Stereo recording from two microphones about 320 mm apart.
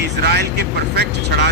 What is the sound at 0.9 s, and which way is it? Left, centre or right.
Speech, right.